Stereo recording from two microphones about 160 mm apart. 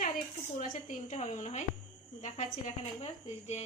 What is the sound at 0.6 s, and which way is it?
A woman's voice, 50° left (ahead or behind).